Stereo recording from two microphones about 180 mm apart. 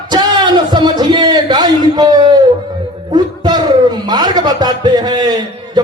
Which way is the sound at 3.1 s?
25° right (ahead or behind).